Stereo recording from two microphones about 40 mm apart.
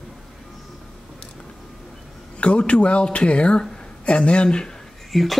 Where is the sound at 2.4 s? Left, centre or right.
Left.